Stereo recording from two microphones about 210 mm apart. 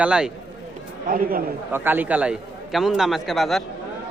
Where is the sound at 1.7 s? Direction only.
10° right (ahead or behind).